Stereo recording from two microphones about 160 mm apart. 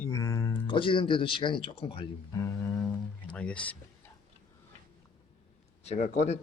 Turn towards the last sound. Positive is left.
turn(degrees=45)  # may be behind; listen again after turning